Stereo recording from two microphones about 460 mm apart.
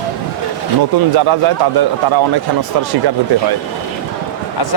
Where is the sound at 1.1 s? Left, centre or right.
Right.